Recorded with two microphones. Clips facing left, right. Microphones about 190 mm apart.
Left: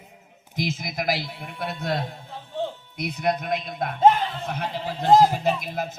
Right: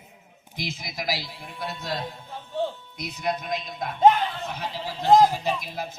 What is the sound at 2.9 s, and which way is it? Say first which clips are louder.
A man's voice: left 5 dB; 55° left (ahead or behind).